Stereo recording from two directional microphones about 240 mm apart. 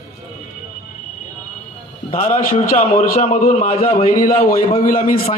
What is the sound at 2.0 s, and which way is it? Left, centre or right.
A man's voice, left.